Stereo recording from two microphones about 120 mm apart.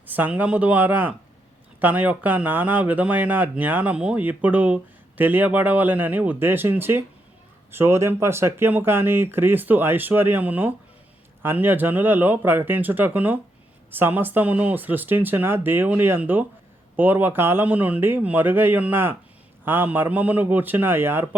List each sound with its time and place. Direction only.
0.1 s speech: 15° right (ahead or behind)